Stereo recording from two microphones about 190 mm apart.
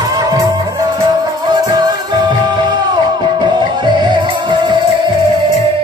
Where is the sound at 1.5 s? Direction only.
20° right (ahead or behind).